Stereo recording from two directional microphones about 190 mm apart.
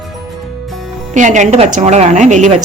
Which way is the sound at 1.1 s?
40° right (ahead or behind).